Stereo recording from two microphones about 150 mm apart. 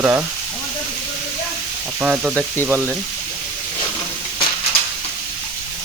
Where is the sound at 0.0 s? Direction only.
15° right (ahead or behind).